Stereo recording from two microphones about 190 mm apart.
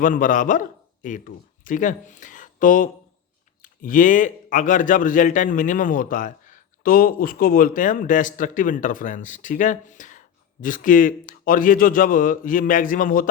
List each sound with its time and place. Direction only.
0.0 s a man's voice: 45° left (ahead or behind)